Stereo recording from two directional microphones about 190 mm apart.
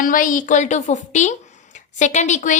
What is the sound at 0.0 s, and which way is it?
Speech, 45° left (ahead or behind).